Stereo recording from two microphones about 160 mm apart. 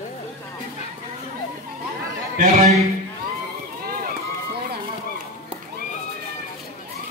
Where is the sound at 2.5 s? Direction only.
40° right (ahead or behind).